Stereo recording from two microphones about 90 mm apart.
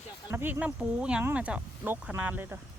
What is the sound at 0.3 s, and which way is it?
Speech, 25° right (ahead or behind).